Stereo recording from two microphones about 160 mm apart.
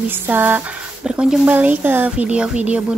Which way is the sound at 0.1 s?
10° right (ahead or behind).